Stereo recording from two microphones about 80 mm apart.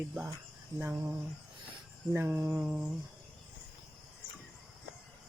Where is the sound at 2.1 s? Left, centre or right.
Right.